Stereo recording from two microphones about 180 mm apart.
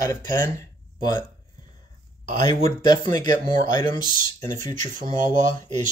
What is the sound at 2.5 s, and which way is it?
Speech, 25° left (ahead or behind).